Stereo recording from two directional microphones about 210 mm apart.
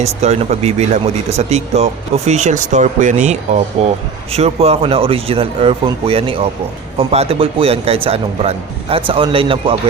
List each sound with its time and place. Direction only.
0.0 s a man's voice: 30° right (ahead or behind)